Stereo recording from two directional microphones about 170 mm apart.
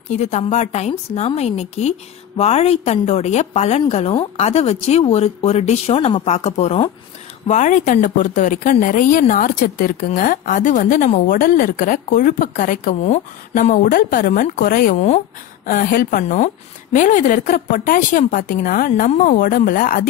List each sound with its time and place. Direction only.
0.1 s a woman's voice: 40° left (ahead or behind)
15.6 s a woman's voice: 55° left (ahead or behind)